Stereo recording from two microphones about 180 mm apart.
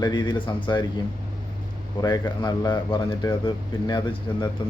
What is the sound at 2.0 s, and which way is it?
A man's voice, 25° left (ahead or behind).